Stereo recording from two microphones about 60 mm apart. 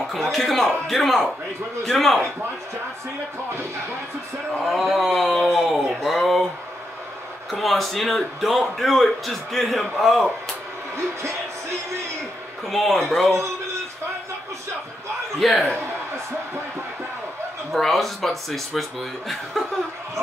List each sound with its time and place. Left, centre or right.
0.0 s a man's voice: centre
4.6 s a man's voice: centre
7.5 s a man's voice: centre
12.6 s a man's voice: centre
15.3 s a man's voice: centre
17.7 s a man's voice: centre